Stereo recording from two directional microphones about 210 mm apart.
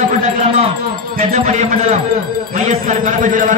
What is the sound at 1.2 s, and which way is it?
A man's voice, 35° right (ahead or behind).